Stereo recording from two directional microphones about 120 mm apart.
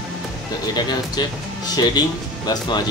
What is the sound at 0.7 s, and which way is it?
Speech, 35° left (ahead or behind).